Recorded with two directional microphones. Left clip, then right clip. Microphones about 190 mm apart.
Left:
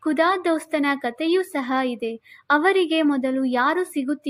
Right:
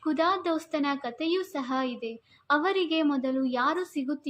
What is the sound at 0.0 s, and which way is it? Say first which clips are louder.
A woman's voice: left 6 dB; 40° left (ahead or behind).